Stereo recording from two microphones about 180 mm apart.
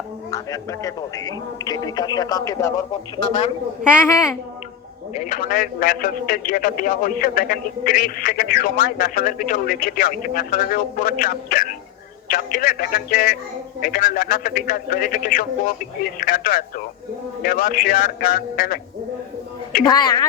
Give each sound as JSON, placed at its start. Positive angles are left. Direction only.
{"t": 0.3, "sound": "a man's voice", "side_deg": 20}
{"t": 5.2, "sound": "speech", "side_deg": 50}
{"t": 19.8, "sound": "a man's voice", "side_deg": 25}